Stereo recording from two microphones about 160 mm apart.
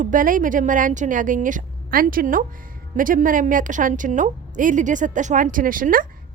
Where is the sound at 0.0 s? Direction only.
55° right (ahead or behind).